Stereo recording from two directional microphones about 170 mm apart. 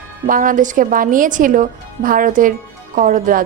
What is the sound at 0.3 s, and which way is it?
A woman's voice, 50° right (ahead or behind).